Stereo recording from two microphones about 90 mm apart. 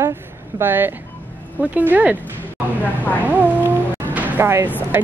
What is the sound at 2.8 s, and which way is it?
Speech, 20° left (ahead or behind).